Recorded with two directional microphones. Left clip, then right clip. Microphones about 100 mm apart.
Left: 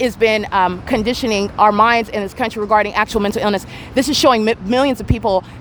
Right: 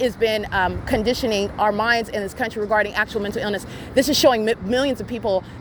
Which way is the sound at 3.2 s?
80° left.